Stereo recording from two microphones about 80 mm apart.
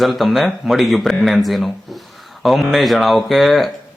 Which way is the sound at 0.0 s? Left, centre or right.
Centre.